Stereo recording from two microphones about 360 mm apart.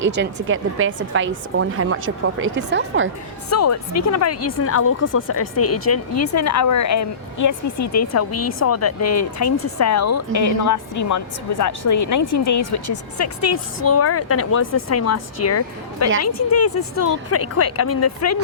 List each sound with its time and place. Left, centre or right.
0.0 s a woman's voice: right
3.5 s speech: left